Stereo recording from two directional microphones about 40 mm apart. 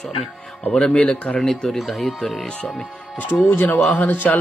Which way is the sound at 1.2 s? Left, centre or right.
Left.